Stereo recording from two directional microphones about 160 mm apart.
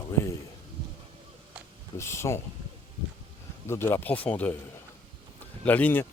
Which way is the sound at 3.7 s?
15° left (ahead or behind).